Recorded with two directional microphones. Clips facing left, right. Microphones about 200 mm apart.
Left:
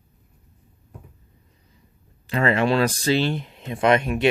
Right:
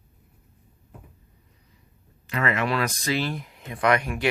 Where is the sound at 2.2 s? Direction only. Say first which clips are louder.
Left 5 dB; 30° left (ahead or behind).